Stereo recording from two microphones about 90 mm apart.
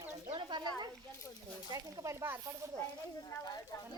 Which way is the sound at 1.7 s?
35° right (ahead or behind).